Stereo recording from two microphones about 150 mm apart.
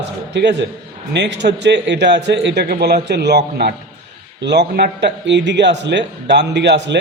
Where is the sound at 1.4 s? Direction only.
90° right.